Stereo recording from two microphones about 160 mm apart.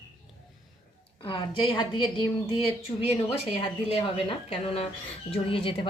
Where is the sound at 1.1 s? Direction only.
35° left (ahead or behind).